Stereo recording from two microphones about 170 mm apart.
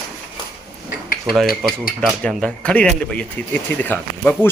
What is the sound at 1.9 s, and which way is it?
A man's voice, 5° left (ahead or behind).